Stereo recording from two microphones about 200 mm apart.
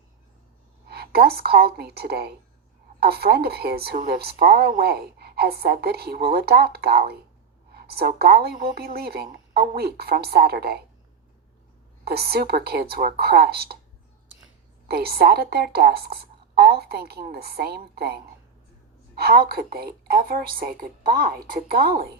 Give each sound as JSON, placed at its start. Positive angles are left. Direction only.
{"t": 0.9, "sound": "a woman's voice", "side_deg": -50}
{"t": 12.0, "sound": "a woman's voice", "side_deg": -50}
{"t": 14.8, "sound": "a woman's voice", "side_deg": -50}